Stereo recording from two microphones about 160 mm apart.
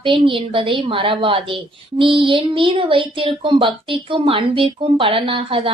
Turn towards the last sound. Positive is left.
turn(degrees=-35)  # may be behind; listen again after turning